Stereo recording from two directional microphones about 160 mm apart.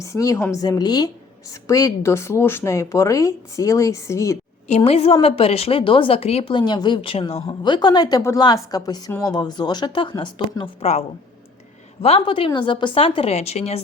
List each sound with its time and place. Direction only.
0.0 s a woman's voice: 20° left (ahead or behind)
4.7 s a woman's voice: 40° left (ahead or behind)
12.0 s a woman's voice: 35° left (ahead or behind)